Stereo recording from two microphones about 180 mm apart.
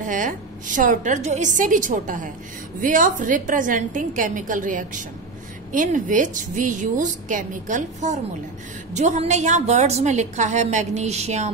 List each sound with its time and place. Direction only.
0.1 s a woman's voice: 45° right (ahead or behind)